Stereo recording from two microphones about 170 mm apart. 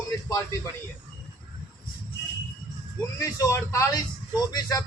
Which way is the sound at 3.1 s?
20° left (ahead or behind).